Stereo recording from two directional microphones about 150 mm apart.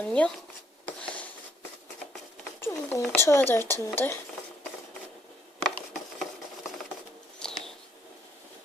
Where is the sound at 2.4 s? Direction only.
15° left (ahead or behind).